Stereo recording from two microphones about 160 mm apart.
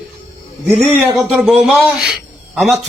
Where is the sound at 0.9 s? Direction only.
Centre (ahead or behind).